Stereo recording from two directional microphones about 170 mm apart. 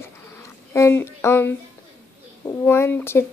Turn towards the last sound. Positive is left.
turn(degrees=15)  # may be behind; listen again after turning